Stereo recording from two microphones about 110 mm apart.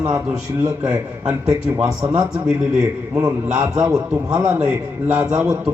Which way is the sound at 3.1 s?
30° right (ahead or behind).